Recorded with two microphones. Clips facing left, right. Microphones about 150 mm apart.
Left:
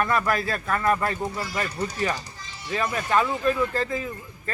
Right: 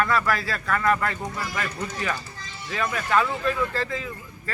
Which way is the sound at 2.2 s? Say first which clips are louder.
Right 1 dB; 25° left (ahead or behind).